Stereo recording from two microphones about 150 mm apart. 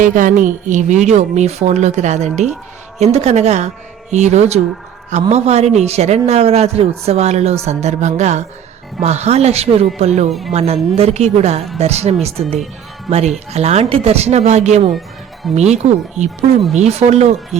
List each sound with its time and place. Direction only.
0.0 s a man's voice: 60° right (ahead or behind)